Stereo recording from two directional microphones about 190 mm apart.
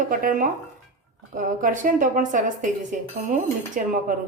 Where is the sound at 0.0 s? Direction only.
45° right (ahead or behind).